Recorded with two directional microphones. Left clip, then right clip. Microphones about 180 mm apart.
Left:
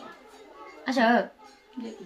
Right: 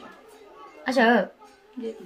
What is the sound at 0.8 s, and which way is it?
Speech, 50° right (ahead or behind).